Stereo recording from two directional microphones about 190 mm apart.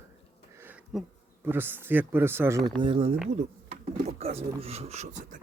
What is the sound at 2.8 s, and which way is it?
Speech, 25° right (ahead or behind).